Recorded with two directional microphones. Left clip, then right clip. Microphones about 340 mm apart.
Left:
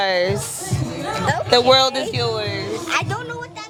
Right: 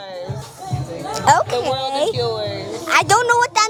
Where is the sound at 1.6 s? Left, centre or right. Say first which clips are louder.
Left 7 dB; left.